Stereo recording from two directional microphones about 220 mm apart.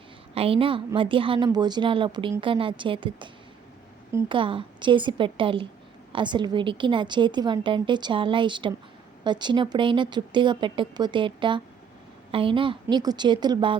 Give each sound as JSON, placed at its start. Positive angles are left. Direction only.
{"t": 0.3, "sound": "a woman's voice", "side_deg": -25}